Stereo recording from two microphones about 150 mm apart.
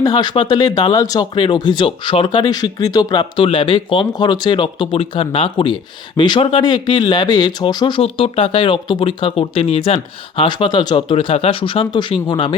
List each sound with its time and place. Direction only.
0.0 s speech: 30° left (ahead or behind)